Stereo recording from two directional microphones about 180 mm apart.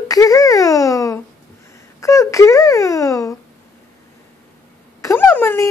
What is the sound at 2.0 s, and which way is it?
Babbling, 15° left (ahead or behind).